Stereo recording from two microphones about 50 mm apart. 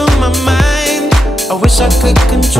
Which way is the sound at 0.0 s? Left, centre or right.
Centre.